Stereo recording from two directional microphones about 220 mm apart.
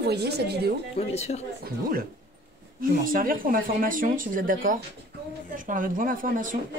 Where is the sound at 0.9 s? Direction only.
30° left (ahead or behind).